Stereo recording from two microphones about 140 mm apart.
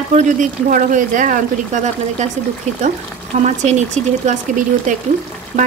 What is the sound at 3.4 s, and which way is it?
Speech, 55° right (ahead or behind).